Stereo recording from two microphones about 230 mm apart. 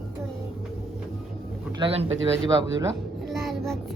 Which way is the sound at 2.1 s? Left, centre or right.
Right.